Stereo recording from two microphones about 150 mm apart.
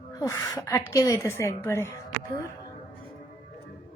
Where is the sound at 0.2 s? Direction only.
20° left (ahead or behind).